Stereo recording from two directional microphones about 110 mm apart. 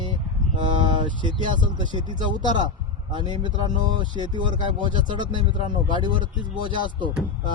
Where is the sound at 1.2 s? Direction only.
45° right (ahead or behind).